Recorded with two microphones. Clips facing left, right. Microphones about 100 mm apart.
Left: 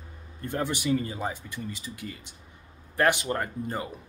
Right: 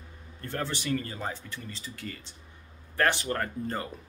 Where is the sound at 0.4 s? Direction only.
15° left (ahead or behind).